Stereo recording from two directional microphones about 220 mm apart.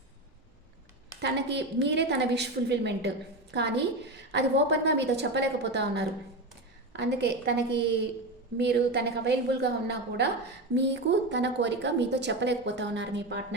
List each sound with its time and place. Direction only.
1.1 s a woman's voice: 50° right (ahead or behind)